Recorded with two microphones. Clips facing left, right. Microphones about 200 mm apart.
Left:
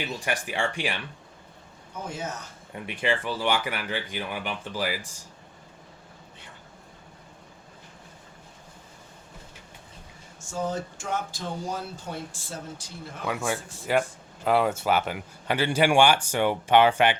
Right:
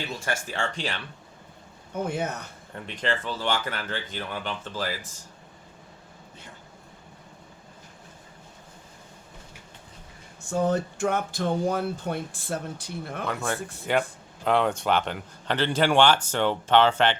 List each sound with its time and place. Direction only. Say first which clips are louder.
0.1 s speech: left 1 dB; 15° left (ahead or behind)
1.9 s speech: right 6 dB; 60° right (ahead or behind)
2.7 s speech: left 2 dB; 10° left (ahead or behind)
10.4 s speech: right 6 dB; 60° right (ahead or behind)
13.2 s speech: left 2 dB; 10° left (ahead or behind)